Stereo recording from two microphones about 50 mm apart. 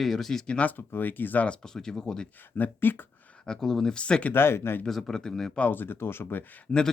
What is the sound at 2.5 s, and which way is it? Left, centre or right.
Speech, left.